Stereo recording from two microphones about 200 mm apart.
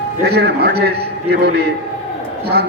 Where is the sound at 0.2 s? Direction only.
55° right (ahead or behind).